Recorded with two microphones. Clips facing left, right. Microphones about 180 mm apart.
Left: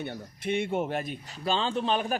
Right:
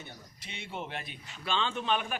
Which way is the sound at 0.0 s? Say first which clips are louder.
Left 14 dB; 55° left (ahead or behind).